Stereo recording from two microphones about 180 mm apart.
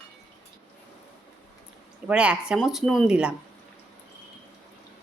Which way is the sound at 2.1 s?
5° right (ahead or behind).